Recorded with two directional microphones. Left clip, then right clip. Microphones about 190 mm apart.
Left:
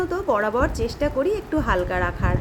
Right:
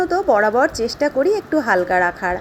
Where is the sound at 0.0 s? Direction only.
15° right (ahead or behind).